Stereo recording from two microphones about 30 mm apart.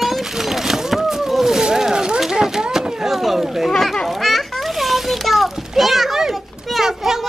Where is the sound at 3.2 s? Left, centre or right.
Centre.